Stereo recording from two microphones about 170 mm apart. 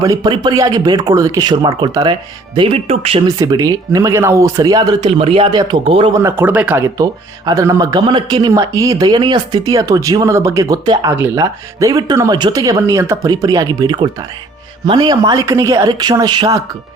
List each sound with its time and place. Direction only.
0.0 s speech: 20° right (ahead or behind)
3.2 s speech: 20° right (ahead or behind)
5.1 s speech: 35° right (ahead or behind)
6.1 s speech: 15° right (ahead or behind)